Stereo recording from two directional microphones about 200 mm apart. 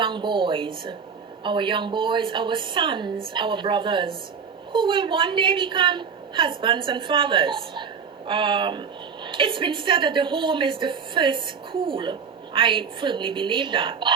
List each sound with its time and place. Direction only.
0.0 s a woman's voice: 25° right (ahead or behind)